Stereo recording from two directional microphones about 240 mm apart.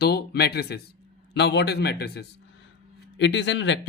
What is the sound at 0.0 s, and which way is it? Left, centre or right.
Speech, left.